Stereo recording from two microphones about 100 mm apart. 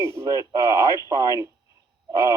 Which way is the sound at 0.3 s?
35° right (ahead or behind).